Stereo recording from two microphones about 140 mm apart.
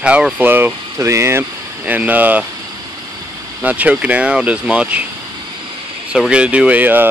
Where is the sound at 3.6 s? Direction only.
10° right (ahead or behind).